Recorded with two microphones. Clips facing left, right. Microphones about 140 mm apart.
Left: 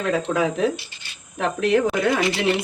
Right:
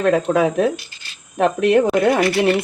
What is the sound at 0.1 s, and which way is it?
Speech, 60° right (ahead or behind).